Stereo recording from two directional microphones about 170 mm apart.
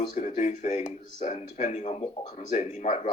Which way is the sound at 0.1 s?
45° left (ahead or behind).